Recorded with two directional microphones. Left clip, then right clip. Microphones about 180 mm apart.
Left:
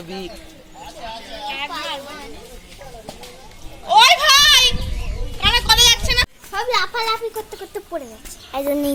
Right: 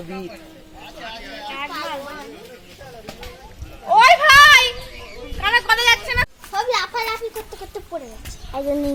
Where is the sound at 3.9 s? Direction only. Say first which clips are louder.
Right 1 dB; 25° right (ahead or behind).